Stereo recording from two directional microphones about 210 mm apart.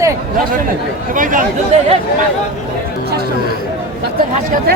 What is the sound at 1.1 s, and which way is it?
Speech, 40° right (ahead or behind).